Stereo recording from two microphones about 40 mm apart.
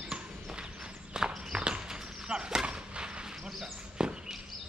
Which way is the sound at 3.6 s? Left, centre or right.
Centre.